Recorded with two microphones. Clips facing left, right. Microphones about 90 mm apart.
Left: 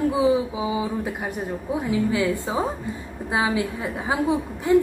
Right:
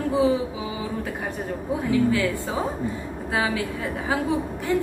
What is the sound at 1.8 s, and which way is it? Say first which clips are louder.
A woman's voice: right 1 dB; 20° left (ahead or behind).